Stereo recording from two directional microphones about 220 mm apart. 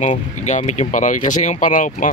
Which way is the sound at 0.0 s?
30° left (ahead or behind).